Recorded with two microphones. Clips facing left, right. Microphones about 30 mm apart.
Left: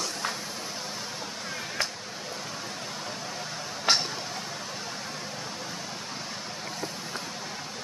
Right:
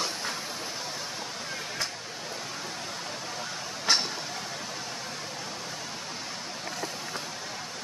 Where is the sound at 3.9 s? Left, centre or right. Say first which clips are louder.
Left 1 dB; left.